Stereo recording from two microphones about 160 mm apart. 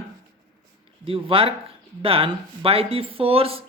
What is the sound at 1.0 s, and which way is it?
Speech, 35° right (ahead or behind).